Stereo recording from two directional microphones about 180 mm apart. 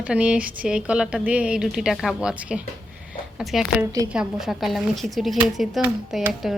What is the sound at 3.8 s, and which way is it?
Speech, 20° right (ahead or behind).